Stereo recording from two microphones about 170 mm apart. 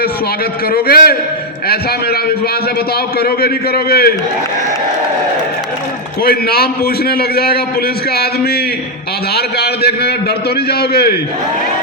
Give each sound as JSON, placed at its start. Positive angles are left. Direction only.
{"t": 0.7, "sound": "a man's voice", "side_deg": 60}
{"t": 3.2, "sound": "a man's voice", "side_deg": 65}
{"t": 6.2, "sound": "a man's voice", "side_deg": 65}